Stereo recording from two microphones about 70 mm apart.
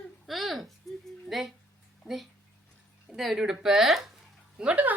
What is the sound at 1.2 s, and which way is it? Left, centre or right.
Music, centre.